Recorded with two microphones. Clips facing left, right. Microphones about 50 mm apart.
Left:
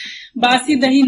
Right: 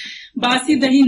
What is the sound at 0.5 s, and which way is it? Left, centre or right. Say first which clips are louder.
Speech: right 1 dB; centre.